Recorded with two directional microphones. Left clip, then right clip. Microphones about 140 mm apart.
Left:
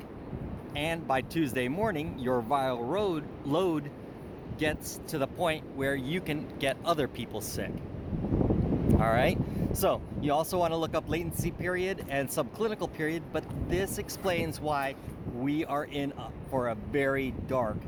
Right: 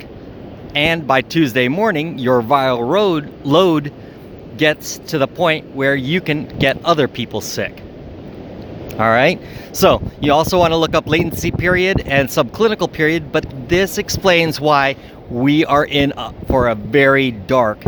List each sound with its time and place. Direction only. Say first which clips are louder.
0.7 s speech: right 16 dB; 50° right (ahead or behind)
8.9 s speech: right 14 dB; 45° right (ahead or behind); by 17.7 s 60° right (ahead or behind)